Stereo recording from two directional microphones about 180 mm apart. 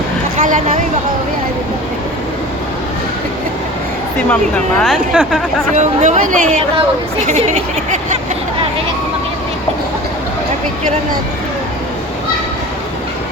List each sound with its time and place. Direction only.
0.3 s speech: 45° right (ahead or behind)
4.3 s speech: 5° left (ahead or behind)
5.7 s speech: 40° right (ahead or behind)